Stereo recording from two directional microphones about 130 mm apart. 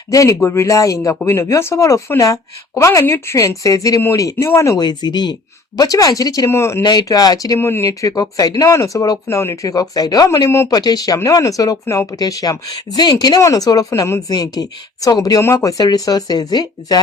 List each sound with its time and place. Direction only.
0.1 s speech: 25° left (ahead or behind)
6.8 s speech: 30° left (ahead or behind)